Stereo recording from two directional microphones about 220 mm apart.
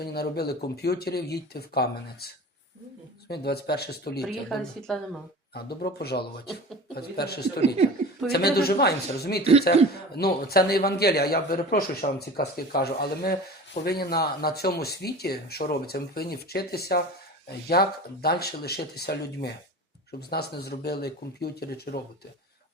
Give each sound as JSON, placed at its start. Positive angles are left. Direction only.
{"t": 0.0, "sound": "a man's voice", "side_deg": 45}
{"t": 4.4, "sound": "a woman's voice", "side_deg": 5}
{"t": 5.5, "sound": "a man's voice", "side_deg": 45}
{"t": 9.4, "sound": "speech", "side_deg": -30}
{"t": 10.2, "sound": "a man's voice", "side_deg": 45}